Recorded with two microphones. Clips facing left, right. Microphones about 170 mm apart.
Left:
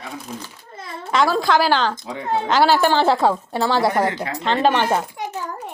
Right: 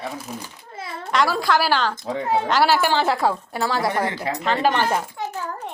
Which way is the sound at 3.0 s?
25° left (ahead or behind).